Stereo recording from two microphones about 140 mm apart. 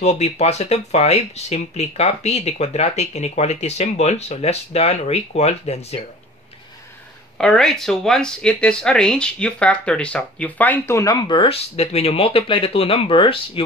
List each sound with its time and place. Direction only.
0.0 s speech: 50° left (ahead or behind)
7.3 s speech: 5° left (ahead or behind); by 13.7 s 40° left (ahead or behind)